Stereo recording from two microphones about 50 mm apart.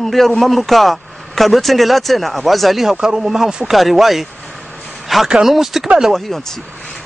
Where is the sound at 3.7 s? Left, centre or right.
Centre.